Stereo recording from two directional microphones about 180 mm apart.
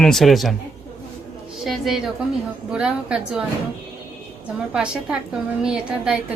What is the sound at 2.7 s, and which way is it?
Speech, 5° right (ahead or behind).